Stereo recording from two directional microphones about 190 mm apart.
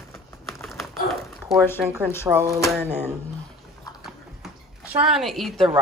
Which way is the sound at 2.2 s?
15° right (ahead or behind).